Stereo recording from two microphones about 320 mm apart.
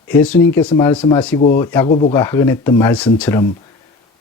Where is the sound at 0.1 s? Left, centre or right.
Centre.